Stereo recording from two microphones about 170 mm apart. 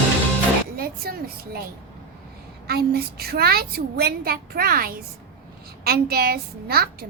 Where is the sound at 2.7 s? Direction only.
65° right (ahead or behind).